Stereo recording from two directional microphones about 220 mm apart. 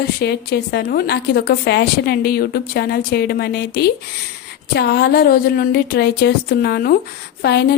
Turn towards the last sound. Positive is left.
turn(degrees=45)  # may be behind; listen again after turning